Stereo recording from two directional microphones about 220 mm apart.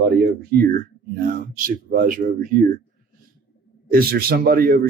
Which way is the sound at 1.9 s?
40° right (ahead or behind).